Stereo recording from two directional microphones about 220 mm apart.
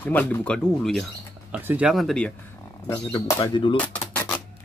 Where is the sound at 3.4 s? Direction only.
25° left (ahead or behind).